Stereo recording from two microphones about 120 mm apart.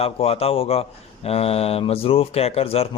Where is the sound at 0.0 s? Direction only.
55° left (ahead or behind).